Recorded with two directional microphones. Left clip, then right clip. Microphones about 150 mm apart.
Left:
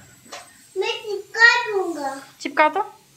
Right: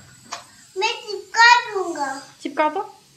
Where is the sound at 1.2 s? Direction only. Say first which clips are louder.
Right 1 dB; 20° right (ahead or behind).